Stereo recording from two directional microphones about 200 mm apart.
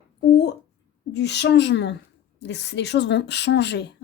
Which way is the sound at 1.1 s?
60° left (ahead or behind).